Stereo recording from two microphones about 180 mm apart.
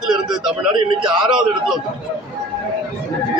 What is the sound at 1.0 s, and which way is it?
Speech, 30° right (ahead or behind).